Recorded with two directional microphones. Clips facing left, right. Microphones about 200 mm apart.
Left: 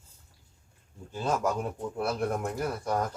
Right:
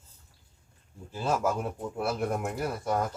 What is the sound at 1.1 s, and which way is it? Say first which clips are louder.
Speech: even; 5° right (ahead or behind).